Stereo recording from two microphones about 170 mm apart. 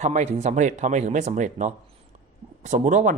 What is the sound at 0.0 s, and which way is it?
Speech, 40° right (ahead or behind).